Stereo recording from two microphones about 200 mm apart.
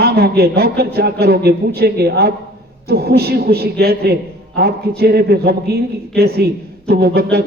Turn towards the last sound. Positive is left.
turn(degrees=-50)  # may be behind; listen again after turning